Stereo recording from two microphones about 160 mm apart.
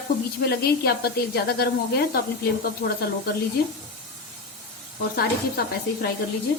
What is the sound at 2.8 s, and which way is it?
Speech, 90° left.